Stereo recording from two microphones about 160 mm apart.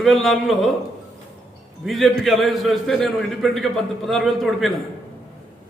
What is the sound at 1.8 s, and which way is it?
A man's voice, centre (ahead or behind).